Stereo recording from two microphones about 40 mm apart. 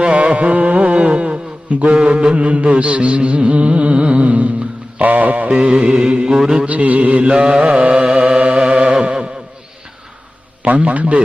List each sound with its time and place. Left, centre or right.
0.0 s speech: right
2.0 s music: right
5.5 s mantra: centre
6.3 s mantra: centre
6.7 s music: right
7.3 s mantra: right
8.6 s chant: right
10.7 s music: right